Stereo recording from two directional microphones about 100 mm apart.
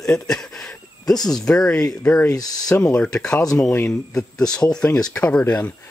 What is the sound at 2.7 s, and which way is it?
Speech, 10° left (ahead or behind).